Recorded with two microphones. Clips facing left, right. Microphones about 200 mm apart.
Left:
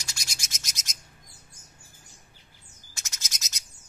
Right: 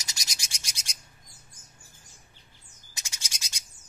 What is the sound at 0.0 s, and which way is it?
Bird, 40° right (ahead or behind).